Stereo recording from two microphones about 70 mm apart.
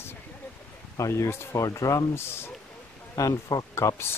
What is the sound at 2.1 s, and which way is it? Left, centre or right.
Speech, left.